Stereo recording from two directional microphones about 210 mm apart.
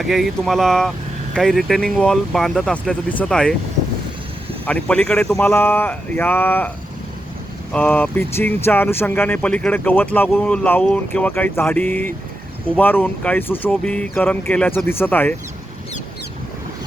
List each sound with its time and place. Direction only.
0.0 s speech: centre (ahead or behind)
4.6 s speech: 5° left (ahead or behind)
7.7 s speech: 10° left (ahead or behind)